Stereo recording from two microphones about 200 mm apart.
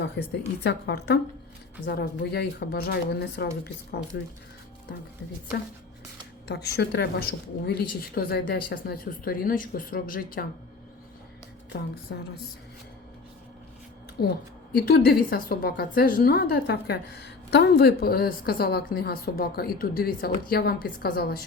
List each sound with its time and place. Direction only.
0.0 s a woman's voice: 60° left (ahead or behind)
6.5 s a woman's voice: 55° left (ahead or behind)
11.7 s speech: 65° left (ahead or behind)
14.2 s a woman's voice: 50° left (ahead or behind)